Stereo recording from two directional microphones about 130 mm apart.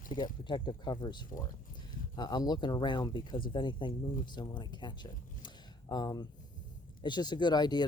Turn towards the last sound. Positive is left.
turn(degrees=35)  # may be behind; listen again after turning